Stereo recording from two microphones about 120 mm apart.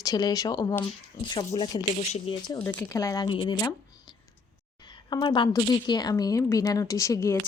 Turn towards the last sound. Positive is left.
turn(degrees=25)  # may be behind; listen again after turning